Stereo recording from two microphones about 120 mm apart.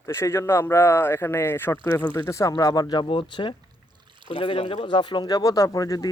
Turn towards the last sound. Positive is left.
turn(degrees=30)  # may be behind; listen again after turning